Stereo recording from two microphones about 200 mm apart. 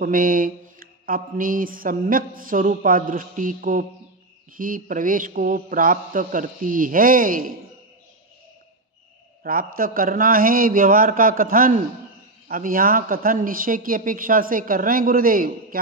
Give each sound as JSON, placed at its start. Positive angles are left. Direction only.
{"t": 0.0, "sound": "speech", "side_deg": -45}
{"t": 9.4, "sound": "a man's voice", "side_deg": -45}